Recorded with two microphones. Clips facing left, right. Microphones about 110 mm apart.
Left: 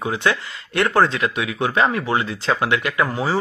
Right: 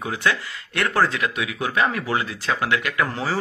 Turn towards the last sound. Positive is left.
turn(degrees=20)  # may be behind; listen again after turning